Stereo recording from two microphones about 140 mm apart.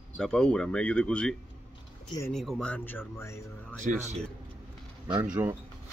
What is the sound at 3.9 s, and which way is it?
Speech, 70° right (ahead or behind).